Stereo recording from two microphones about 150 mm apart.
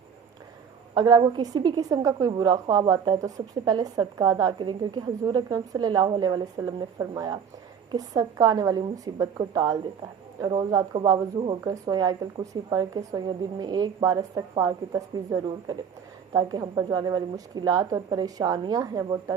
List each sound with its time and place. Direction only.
0.9 s a woman's voice: 30° right (ahead or behind)